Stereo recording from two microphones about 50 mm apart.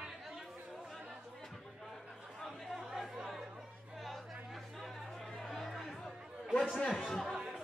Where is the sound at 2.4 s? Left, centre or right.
Centre.